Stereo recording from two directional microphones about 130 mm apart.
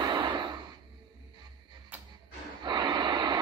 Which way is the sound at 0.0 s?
35° right (ahead or behind).